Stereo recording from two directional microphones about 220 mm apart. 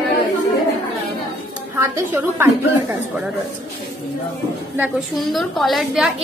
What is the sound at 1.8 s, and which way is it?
Speech, 10° right (ahead or behind).